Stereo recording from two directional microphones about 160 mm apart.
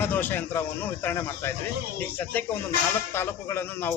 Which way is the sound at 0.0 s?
10° left (ahead or behind).